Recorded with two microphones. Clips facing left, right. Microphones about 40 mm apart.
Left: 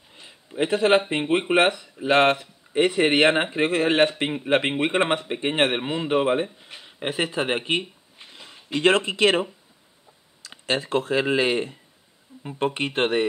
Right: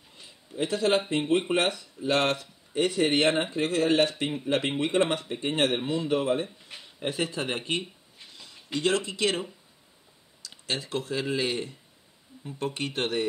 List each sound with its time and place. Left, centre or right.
0.1 s a man's voice: left
8.2 s a sound: left
8.7 s speech: left